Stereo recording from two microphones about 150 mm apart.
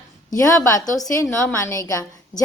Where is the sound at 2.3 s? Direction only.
55° left (ahead or behind).